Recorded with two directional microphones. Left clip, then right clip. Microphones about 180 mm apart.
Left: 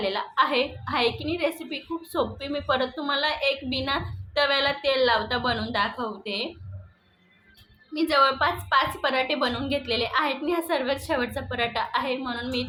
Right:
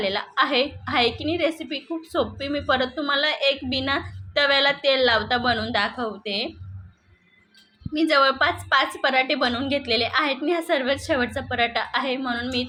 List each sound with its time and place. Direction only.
0.0 s a woman's voice: 15° right (ahead or behind)
7.9 s a woman's voice: 15° right (ahead or behind)